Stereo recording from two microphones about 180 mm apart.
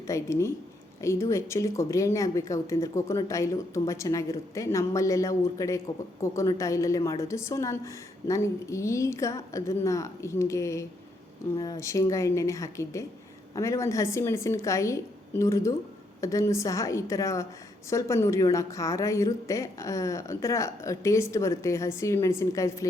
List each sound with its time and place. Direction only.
0.1 s a woman's voice: 15° left (ahead or behind)